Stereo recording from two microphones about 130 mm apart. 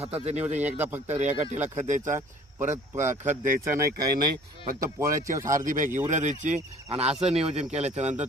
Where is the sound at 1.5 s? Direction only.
65° right (ahead or behind).